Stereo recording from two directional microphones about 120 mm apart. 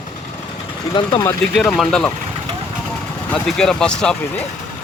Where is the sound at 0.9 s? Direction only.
40° left (ahead or behind).